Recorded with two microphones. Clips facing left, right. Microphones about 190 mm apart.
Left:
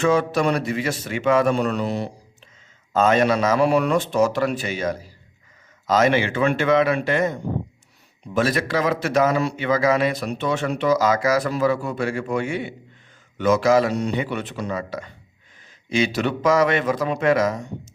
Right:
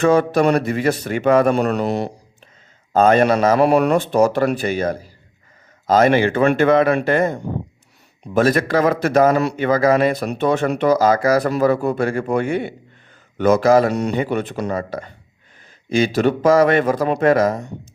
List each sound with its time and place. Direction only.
0.0 s a man's voice: 55° right (ahead or behind)
3.1 s a man's voice: 50° right (ahead or behind)
14.1 s a man's voice: 45° right (ahead or behind)